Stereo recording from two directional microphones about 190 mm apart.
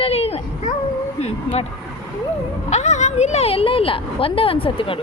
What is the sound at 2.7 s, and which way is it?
Speech, 35° left (ahead or behind).